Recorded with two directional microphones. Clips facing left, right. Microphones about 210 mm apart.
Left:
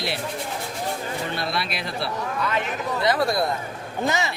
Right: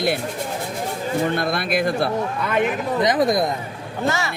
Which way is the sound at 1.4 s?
50° right (ahead or behind).